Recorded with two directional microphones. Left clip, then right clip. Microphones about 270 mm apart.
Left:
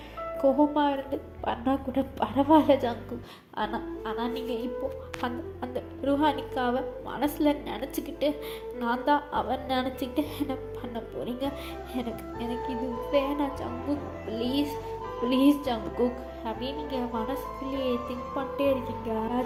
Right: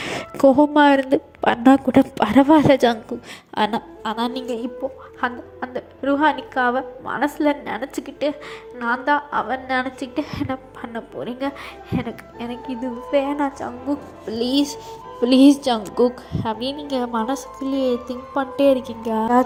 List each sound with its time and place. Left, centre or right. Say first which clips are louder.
0.0 s a woman's voice: right 10 dB; right
5.2 s a woman's voice: right 9 dB; centre
14.3 s a woman's voice: right 8 dB; right